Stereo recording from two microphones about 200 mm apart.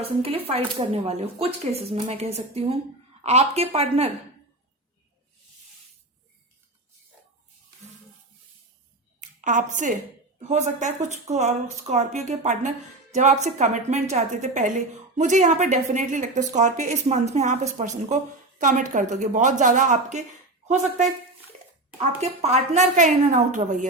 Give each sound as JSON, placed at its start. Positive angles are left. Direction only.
{"t": 0.0, "sound": "speech", "side_deg": -30}
{"t": 9.2, "sound": "a woman's voice", "side_deg": -40}
{"t": 22.2, "sound": "speech", "side_deg": -35}